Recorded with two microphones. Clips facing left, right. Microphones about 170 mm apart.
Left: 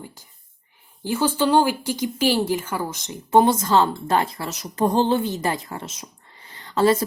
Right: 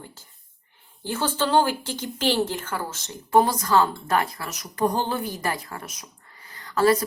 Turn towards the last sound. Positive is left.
turn(degrees=25)  # may be behind; listen again after turning